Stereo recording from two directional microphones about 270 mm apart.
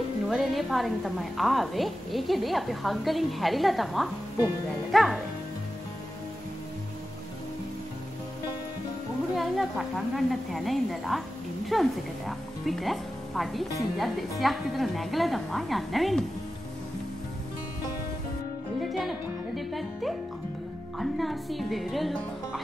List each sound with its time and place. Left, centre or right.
0.3 s a woman's voice: centre
9.4 s a woman's voice: centre
18.8 s music: centre
21.0 s a woman's voice: centre